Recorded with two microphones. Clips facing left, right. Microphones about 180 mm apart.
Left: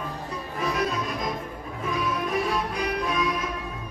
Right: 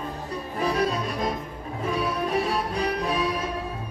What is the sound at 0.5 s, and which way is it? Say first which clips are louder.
Music: right 2 dB; 30° right (ahead or behind).